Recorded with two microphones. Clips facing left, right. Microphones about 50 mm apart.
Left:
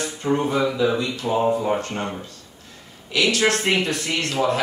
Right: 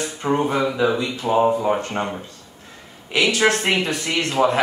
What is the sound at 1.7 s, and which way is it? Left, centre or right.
Speech, right.